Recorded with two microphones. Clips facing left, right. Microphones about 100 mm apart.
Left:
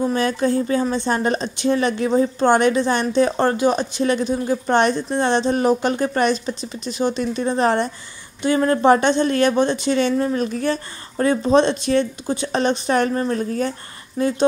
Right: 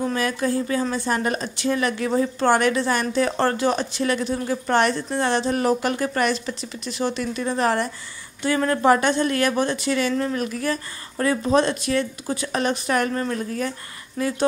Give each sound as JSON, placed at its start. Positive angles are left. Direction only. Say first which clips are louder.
{"t": 0.0, "sound": "speech", "louder": "left 4 dB", "side_deg": 25}